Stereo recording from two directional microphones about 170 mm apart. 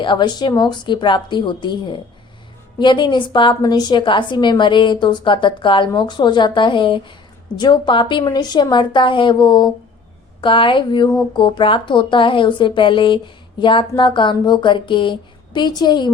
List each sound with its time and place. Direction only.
0.0 s a woman's voice: 25° left (ahead or behind)